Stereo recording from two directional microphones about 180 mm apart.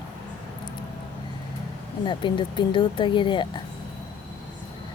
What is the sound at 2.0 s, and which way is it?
Speech, 25° left (ahead or behind).